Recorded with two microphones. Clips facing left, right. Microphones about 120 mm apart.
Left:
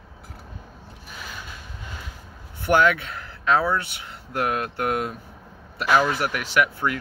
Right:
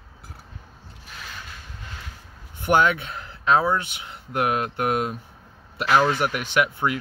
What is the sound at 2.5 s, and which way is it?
Speech, 20° right (ahead or behind).